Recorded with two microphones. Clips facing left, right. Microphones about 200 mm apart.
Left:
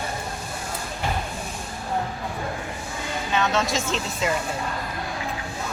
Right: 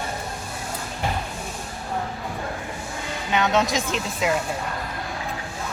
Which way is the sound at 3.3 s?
15° right (ahead or behind).